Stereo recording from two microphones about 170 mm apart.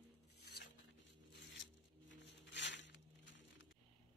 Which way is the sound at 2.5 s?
90° left.